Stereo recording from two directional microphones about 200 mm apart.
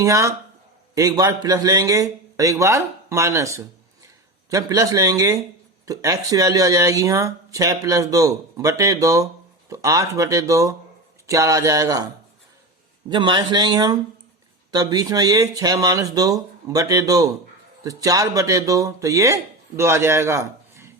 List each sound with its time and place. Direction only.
0.0 s speech: 15° right (ahead or behind)
13.1 s speech: 25° right (ahead or behind)